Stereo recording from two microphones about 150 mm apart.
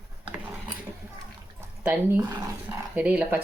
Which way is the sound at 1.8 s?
15° right (ahead or behind).